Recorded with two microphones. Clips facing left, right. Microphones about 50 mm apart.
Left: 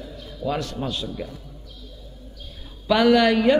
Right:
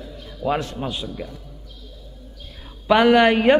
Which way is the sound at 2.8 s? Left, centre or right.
Right.